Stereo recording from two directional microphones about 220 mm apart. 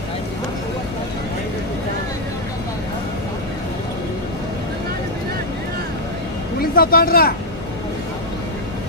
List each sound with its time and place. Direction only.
6.6 s speech: 40° left (ahead or behind)